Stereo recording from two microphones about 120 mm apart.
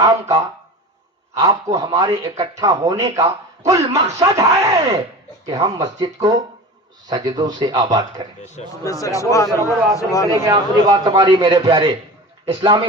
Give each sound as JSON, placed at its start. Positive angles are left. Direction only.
{"t": 0.0, "sound": "a man's voice", "side_deg": -30}
{"t": 8.8, "sound": "speech", "side_deg": 25}
{"t": 10.3, "sound": "a man's voice", "side_deg": -30}